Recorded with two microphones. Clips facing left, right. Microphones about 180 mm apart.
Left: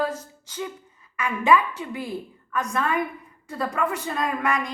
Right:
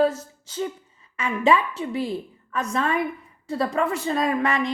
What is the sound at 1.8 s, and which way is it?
Speech, 30° right (ahead or behind).